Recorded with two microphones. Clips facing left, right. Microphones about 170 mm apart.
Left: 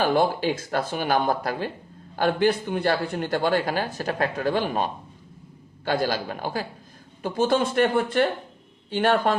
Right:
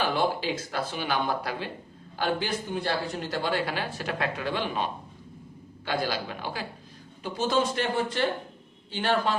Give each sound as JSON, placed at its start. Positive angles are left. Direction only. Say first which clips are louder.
{"t": 0.0, "sound": "a man's voice", "louder": "left 5 dB", "side_deg": 45}